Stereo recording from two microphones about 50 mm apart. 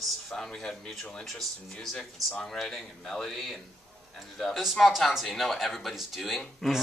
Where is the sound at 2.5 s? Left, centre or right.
Centre.